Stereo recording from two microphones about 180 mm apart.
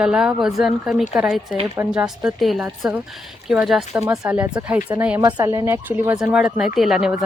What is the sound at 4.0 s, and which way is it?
Speech, 15° right (ahead or behind).